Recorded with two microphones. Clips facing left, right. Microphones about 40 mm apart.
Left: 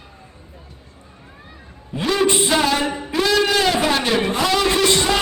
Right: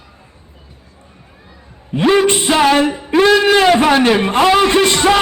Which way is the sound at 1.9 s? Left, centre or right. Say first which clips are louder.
Right 9 dB; right.